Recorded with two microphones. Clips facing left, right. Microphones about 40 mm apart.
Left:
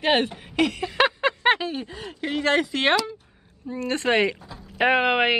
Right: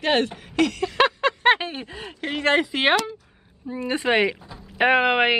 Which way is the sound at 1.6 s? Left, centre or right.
Right.